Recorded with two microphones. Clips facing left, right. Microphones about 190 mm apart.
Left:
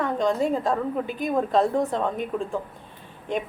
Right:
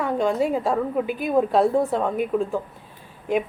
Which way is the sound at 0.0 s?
10° right (ahead or behind).